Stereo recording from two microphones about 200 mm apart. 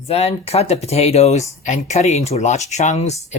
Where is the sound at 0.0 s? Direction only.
30° left (ahead or behind).